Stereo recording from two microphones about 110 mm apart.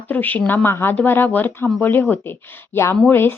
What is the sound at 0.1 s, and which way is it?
Speech, 15° left (ahead or behind).